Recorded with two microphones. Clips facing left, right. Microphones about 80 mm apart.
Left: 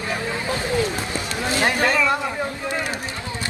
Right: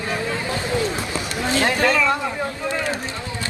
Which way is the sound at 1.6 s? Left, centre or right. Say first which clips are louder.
Right 1 dB; left.